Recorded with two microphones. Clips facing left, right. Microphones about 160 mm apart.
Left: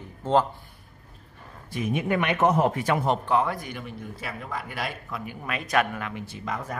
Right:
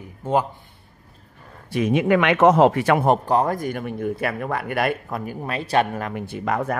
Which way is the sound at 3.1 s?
40° right (ahead or behind).